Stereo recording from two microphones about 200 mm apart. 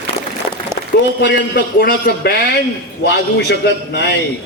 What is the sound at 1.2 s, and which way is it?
A man's voice, 55° left (ahead or behind).